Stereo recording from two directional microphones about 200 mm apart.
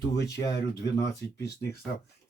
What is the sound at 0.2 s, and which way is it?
Speech, 60° left (ahead or behind).